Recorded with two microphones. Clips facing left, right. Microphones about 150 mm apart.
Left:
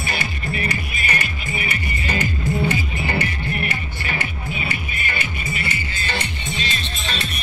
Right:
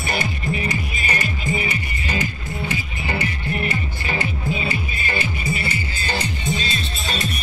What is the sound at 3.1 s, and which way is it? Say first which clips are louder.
Music: right 1 dB; 20° right (ahead or behind).